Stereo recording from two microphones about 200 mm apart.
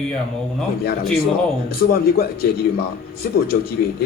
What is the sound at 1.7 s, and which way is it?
A man's voice, 50° left (ahead or behind).